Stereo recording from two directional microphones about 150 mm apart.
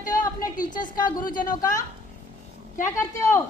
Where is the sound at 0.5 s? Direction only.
60° left (ahead or behind).